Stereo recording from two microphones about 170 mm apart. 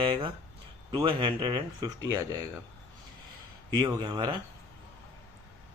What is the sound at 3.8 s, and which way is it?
Speech, 25° right (ahead or behind).